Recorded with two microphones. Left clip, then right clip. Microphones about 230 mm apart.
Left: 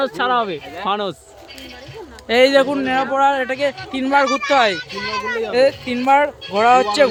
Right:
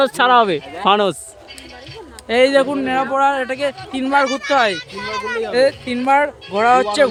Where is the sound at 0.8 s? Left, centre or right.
Right.